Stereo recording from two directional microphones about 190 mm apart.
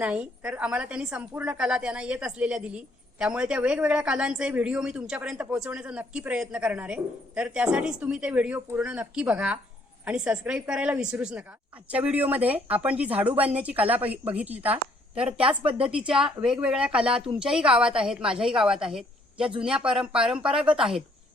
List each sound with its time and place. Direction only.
0.0 s a woman's voice: 5° right (ahead or behind)
15.4 s speech: 30° right (ahead or behind)
16.0 s a woman's voice: 5° right (ahead or behind)